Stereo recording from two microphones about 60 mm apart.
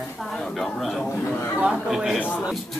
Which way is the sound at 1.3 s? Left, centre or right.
Left.